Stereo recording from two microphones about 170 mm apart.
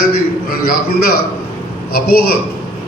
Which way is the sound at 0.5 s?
60° left (ahead or behind).